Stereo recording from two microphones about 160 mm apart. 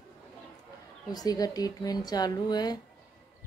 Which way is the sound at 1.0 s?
25° left (ahead or behind).